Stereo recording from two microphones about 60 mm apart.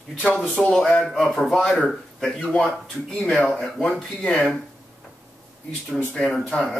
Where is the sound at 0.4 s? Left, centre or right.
Centre.